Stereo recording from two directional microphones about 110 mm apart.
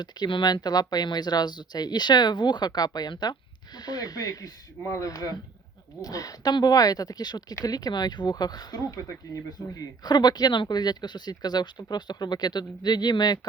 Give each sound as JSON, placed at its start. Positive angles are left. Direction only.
{"t": 0.0, "sound": "speech", "side_deg": 45}